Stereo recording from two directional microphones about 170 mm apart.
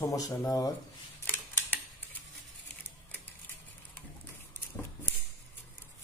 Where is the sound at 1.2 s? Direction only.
10° left (ahead or behind).